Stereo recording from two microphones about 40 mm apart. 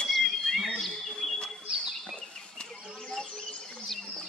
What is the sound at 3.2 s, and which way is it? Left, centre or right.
Bird, left.